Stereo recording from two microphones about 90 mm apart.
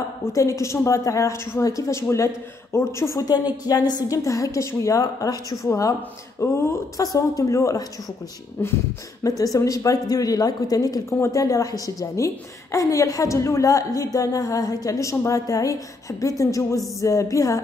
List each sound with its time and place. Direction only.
0.3 s a woman's voice: 35° left (ahead or behind)
3.4 s a woman's voice: 45° left (ahead or behind)
8.6 s beatboxing: 25° left (ahead or behind)
9.2 s a woman's voice: 40° left (ahead or behind)